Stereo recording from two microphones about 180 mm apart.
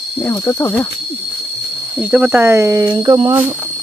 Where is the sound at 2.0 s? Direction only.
10° right (ahead or behind).